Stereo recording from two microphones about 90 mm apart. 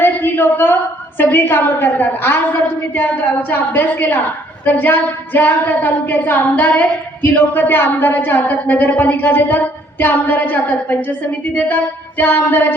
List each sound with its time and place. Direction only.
0.0 s a sound: 25° left (ahead or behind)
1.2 s speech: 25° left (ahead or behind)
3.5 s speech: 20° left (ahead or behind)